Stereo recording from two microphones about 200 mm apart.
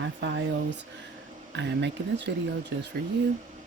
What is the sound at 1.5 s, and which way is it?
Speech, 60° right (ahead or behind).